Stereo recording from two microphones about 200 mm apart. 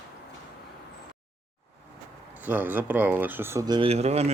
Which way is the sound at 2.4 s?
10° right (ahead or behind).